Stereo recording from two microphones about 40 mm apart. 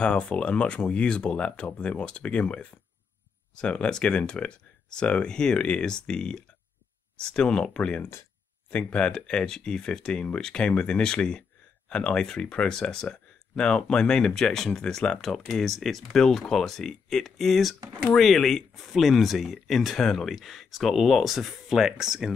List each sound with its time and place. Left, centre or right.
0.0 s speech: left; by 22.3 s centre